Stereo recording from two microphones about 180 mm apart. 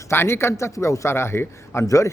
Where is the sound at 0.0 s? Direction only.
15° left (ahead or behind).